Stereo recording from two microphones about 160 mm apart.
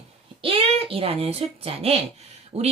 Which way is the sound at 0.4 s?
35° right (ahead or behind).